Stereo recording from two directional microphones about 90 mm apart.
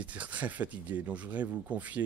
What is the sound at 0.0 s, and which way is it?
Speech, 15° right (ahead or behind).